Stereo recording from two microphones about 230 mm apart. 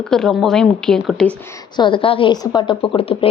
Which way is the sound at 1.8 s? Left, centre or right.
Left.